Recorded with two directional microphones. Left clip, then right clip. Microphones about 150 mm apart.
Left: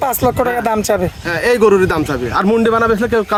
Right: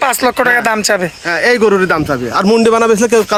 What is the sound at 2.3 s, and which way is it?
Speech, 85° right.